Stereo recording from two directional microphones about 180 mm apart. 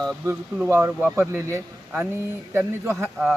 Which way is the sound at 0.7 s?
15° right (ahead or behind).